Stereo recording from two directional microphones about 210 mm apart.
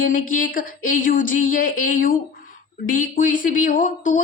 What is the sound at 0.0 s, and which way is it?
A woman's voice, 40° left (ahead or behind).